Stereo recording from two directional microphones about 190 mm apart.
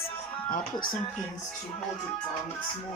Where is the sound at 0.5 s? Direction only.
50° left (ahead or behind).